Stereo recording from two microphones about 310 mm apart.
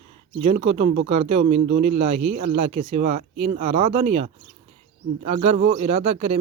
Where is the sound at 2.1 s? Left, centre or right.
Right.